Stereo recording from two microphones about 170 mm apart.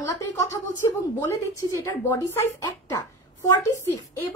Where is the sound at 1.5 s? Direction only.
15° left (ahead or behind).